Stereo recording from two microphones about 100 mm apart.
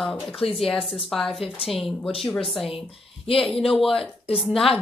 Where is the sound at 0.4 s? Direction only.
75° left (ahead or behind).